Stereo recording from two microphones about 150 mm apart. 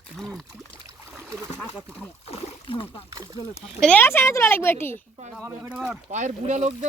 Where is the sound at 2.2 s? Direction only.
40° left (ahead or behind).